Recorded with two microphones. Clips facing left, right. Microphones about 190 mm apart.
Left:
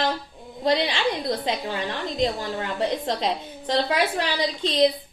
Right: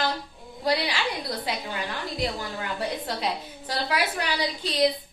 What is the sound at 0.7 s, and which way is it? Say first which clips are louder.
A woman's voice: left 4 dB; 25° left (ahead or behind).